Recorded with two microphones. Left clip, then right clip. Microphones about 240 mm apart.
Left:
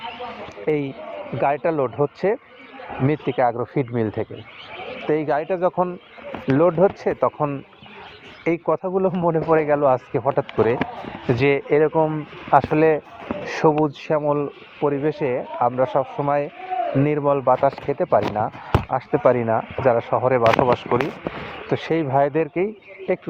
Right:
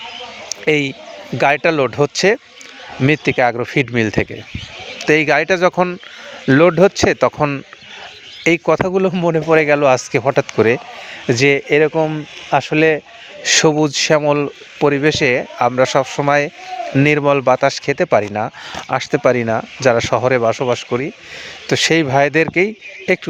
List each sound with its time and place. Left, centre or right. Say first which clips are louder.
0.6 s speech: right 7 dB; right
6.5 s speech: right 6 dB; right
8.9 s speech: right 4 dB; right
13.4 s speech: right 6 dB; right
16.1 s speech: right 7 dB; right
17.7 s speech: right 5 dB; right
21.7 s speech: right 7 dB; right